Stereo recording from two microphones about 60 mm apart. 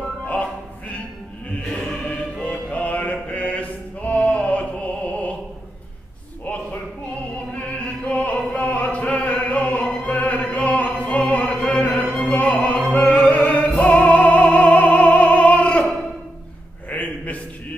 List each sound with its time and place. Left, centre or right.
2.4 s music: left
6.4 s a sound: left
7.3 s opera: left
12.3 s music: left
12.9 s opera: left
16.9 s a sound: left